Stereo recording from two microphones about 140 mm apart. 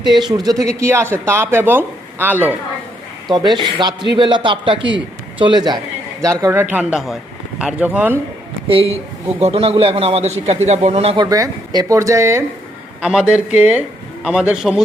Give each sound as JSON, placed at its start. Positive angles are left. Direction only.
{"t": 0.0, "sound": "speech", "side_deg": -30}
{"t": 3.2, "sound": "a man's voice", "side_deg": -30}
{"t": 6.4, "sound": "speech", "side_deg": -15}
{"t": 8.6, "sound": "a man's voice", "side_deg": -40}
{"t": 11.3, "sound": "speech", "side_deg": -25}
{"t": 13.0, "sound": "a man's voice", "side_deg": -5}